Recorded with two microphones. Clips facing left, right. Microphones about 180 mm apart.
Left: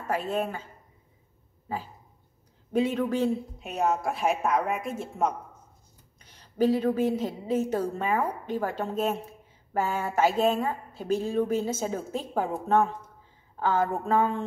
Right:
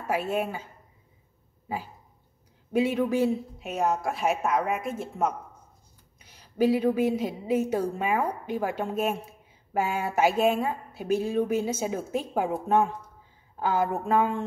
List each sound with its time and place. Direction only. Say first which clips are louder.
0.0 s speech: right 1 dB; 10° right (ahead or behind)
1.7 s a woman's voice: right 1 dB; 10° right (ahead or behind)